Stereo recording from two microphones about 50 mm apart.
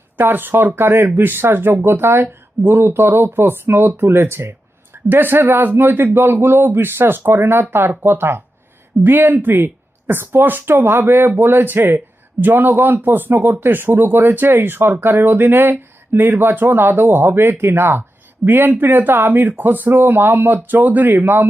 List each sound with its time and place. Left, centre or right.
0.2 s speech: right
5.0 s speech: right